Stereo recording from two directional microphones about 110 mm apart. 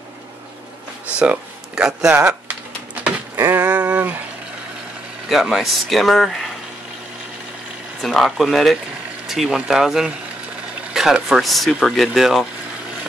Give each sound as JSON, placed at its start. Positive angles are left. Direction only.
{"t": 1.2, "sound": "speech", "side_deg": -10}
{"t": 3.0, "sound": "a sound", "side_deg": -20}
{"t": 5.3, "sound": "speech", "side_deg": -5}
{"t": 8.0, "sound": "speech", "side_deg": 5}